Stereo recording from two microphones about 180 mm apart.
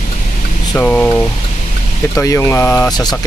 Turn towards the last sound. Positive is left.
turn(degrees=20)  # may be behind; listen again after turning